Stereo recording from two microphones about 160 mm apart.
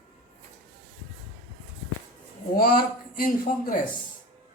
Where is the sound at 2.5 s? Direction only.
65° left (ahead or behind).